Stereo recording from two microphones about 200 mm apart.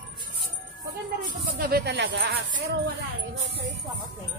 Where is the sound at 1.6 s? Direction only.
55° right (ahead or behind).